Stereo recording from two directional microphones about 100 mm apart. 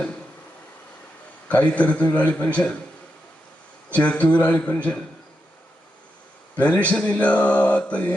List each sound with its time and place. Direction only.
1.5 s speech: 15° left (ahead or behind)
3.8 s speech: 15° left (ahead or behind)
6.6 s speech: 15° left (ahead or behind)